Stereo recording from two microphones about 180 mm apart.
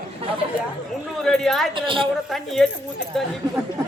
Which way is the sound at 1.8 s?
30° right (ahead or behind).